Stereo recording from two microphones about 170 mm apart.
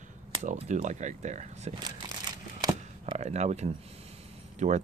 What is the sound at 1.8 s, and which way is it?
Crumpling, 25° right (ahead or behind).